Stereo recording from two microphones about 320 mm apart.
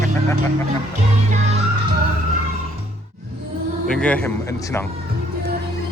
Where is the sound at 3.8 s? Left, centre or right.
Centre.